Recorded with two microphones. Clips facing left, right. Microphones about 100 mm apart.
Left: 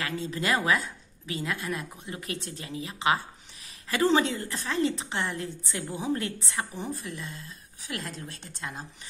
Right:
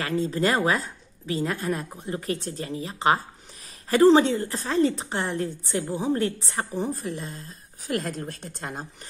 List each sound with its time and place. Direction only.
0.0 s a woman's voice: 35° right (ahead or behind)